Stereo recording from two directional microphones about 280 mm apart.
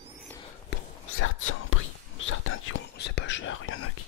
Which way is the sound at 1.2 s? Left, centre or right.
Left.